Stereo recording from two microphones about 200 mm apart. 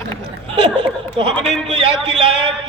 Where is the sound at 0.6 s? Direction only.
30° right (ahead or behind).